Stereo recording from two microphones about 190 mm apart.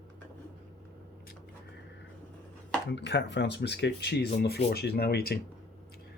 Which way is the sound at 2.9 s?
65° left (ahead or behind).